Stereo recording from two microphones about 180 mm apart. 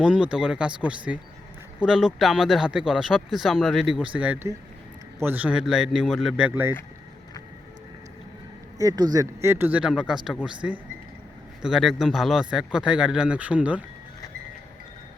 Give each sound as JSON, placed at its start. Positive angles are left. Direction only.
{"t": 0.0, "sound": "speech", "side_deg": -5}
{"t": 6.5, "sound": "speech", "side_deg": -10}
{"t": 8.8, "sound": "speech", "side_deg": -20}